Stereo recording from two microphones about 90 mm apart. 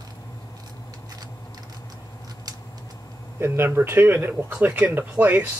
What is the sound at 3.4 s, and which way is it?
Speech, 25° right (ahead or behind).